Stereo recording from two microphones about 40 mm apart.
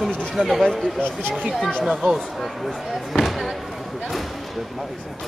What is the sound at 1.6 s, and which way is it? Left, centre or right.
Speech, centre.